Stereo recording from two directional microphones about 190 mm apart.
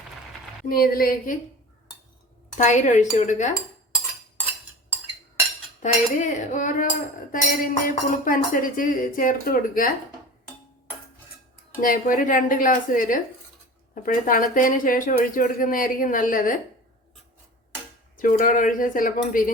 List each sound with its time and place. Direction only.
0.7 s speech: 50° left (ahead or behind)
2.6 s cutlery: 40° left (ahead or behind)
5.8 s speech: 40° left (ahead or behind)
11.8 s speech: 45° left (ahead or behind)
18.2 s speech: 45° left (ahead or behind)